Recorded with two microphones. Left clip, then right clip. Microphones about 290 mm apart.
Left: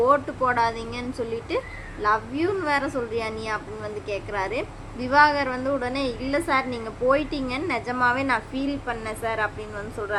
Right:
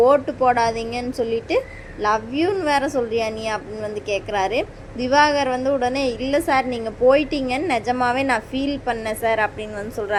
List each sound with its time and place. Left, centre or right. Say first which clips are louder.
0.0 s a woman's voice: right 5 dB; centre